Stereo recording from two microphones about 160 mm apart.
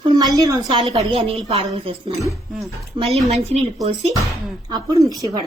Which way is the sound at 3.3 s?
40° right (ahead or behind).